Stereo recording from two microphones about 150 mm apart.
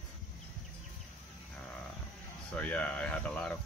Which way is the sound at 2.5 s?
10° left (ahead or behind).